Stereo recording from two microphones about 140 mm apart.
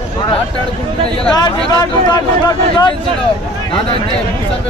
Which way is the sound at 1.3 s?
30° left (ahead or behind).